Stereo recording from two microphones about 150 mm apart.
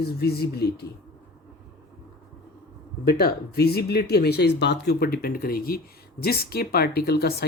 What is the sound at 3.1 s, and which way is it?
Speech, 90° left.